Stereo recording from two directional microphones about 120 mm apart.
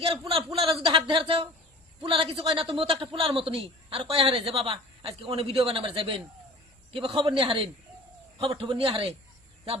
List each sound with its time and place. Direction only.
0.0 s a man's voice: 50° right (ahead or behind)